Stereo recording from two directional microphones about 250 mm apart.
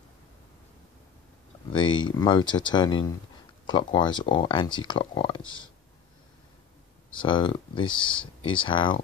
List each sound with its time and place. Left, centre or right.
1.7 s a sound: centre
2.0 s speech: centre
7.2 s speech: centre